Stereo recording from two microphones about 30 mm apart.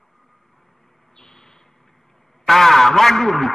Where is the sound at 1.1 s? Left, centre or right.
Centre.